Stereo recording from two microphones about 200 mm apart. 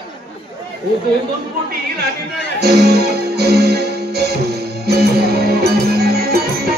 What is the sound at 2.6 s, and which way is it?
Music, 55° right (ahead or behind).